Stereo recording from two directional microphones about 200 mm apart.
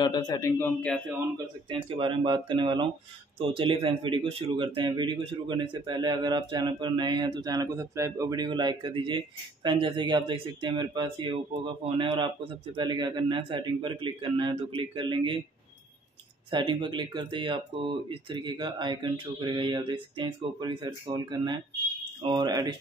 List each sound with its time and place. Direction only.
0.0 s speech: 20° left (ahead or behind)
1.7 s a man's voice: 25° right (ahead or behind)
16.4 s a man's voice: 25° right (ahead or behind)